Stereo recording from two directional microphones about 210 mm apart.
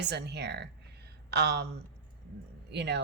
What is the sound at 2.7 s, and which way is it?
Speech, 55° right (ahead or behind).